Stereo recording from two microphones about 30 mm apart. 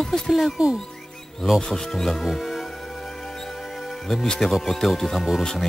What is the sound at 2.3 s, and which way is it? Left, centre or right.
Music, centre.